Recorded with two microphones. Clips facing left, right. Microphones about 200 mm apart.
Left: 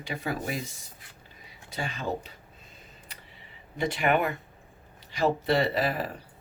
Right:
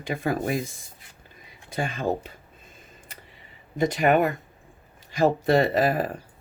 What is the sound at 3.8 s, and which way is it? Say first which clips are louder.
Speech: right 5 dB; 40° right (ahead or behind).